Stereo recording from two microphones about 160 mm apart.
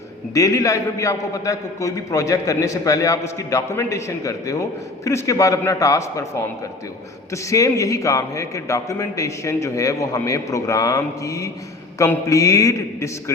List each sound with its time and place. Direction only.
0.3 s a man's voice: 20° left (ahead or behind)
7.5 s a man's voice: 20° left (ahead or behind)